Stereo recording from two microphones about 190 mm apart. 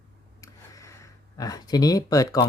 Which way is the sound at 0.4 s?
15° left (ahead or behind).